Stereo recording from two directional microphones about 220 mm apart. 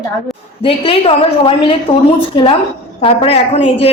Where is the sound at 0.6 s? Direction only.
25° left (ahead or behind).